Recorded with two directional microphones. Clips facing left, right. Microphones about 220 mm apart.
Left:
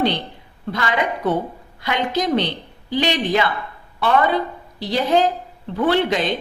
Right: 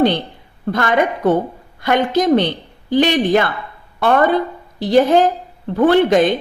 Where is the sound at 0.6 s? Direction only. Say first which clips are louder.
Right 6 dB; 50° right (ahead or behind).